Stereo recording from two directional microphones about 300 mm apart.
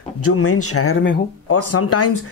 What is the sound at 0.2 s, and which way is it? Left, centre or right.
Speech, left.